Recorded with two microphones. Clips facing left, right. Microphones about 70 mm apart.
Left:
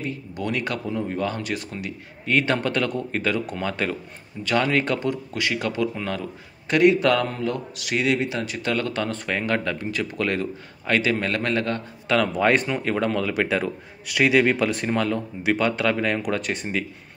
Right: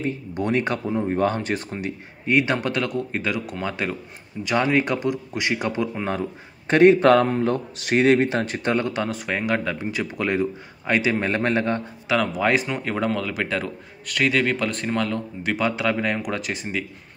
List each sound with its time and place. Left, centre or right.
0.0 s speech: right
2.2 s speech: centre; by 8.7 s right
8.7 s speech: centre
12.1 s speech: centre